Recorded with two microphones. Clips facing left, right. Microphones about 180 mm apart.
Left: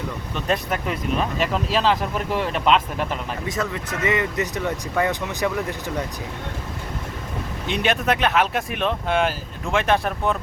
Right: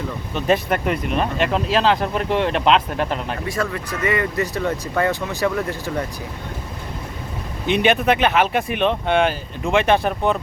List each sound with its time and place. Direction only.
0.3 s speech: centre (ahead or behind)
3.5 s speech: 20° left (ahead or behind)
7.7 s speech: centre (ahead or behind)